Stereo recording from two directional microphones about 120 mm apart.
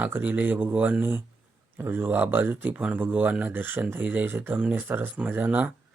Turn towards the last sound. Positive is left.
turn(degrees=-15)  # may be behind; listen again after turning